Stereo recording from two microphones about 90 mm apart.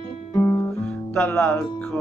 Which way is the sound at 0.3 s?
20° left (ahead or behind).